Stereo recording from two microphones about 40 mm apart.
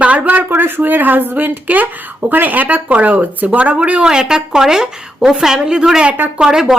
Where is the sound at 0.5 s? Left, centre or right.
Right.